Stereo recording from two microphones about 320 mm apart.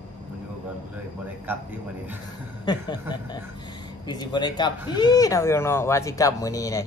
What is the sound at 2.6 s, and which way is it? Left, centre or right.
Speech, centre.